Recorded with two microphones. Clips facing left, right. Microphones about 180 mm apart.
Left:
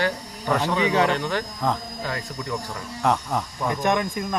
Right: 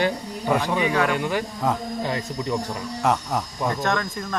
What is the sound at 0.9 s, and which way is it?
Speech, 25° left (ahead or behind).